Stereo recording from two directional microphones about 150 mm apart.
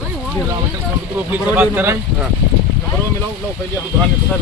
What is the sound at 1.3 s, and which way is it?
Speech, 10° right (ahead or behind).